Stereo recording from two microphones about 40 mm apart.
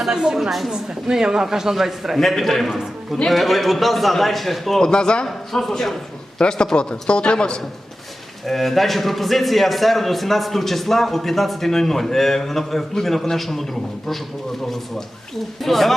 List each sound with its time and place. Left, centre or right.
0.1 s a woman's voice: centre
2.2 s a man's voice: centre
2.6 s a man's voice: centre
4.8 s a man's voice: left
5.2 s speech: centre
6.4 s a man's voice: left
8.4 s a man's voice: centre
15.6 s a man's voice: centre